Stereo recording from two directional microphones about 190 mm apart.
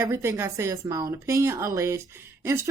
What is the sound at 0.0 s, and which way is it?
Speech, 15° right (ahead or behind).